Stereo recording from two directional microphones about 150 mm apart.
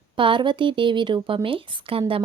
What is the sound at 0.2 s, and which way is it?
A woman's voice, 35° right (ahead or behind).